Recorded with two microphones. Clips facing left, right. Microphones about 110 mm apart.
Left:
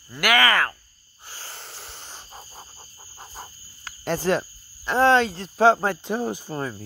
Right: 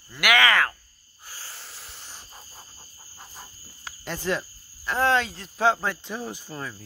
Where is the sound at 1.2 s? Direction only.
30° left (ahead or behind).